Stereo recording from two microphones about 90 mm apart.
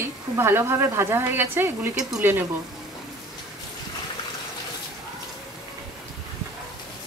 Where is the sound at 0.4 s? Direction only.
25° right (ahead or behind).